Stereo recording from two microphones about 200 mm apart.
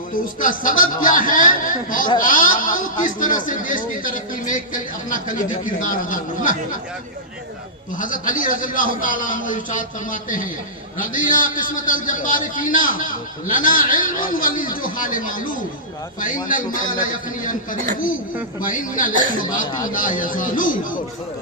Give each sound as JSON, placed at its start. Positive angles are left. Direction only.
{"t": 0.4, "sound": "a man's voice", "side_deg": 45}
{"t": 7.9, "sound": "a man's voice", "side_deg": 40}
{"t": 16.7, "sound": "a man's voice", "side_deg": 40}